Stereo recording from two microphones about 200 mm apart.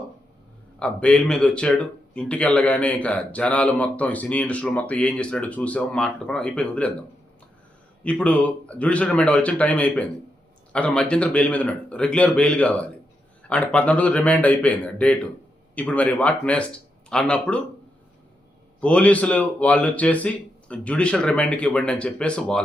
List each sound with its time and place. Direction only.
0.8 s speech: 5° left (ahead or behind)
8.0 s speech: 5° left (ahead or behind)
18.8 s speech: 5° left (ahead or behind)